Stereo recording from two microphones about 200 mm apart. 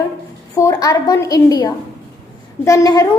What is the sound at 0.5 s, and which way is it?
A woman's voice, 20° left (ahead or behind).